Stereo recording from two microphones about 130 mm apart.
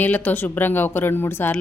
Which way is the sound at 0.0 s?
15° left (ahead or behind).